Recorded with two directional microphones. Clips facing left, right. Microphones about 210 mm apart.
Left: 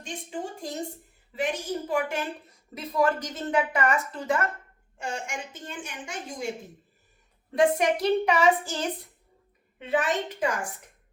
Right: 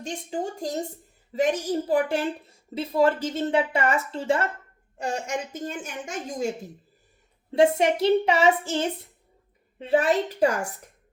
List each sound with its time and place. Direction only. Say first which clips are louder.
0.0 s a woman's voice: right 5 dB; 40° right (ahead or behind)
7.5 s a woman's voice: right 3 dB; 25° right (ahead or behind)